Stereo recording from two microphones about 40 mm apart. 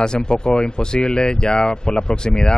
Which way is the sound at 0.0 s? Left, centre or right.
Left.